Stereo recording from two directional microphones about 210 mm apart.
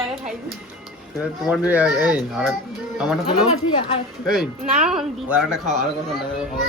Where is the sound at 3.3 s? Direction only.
30° left (ahead or behind).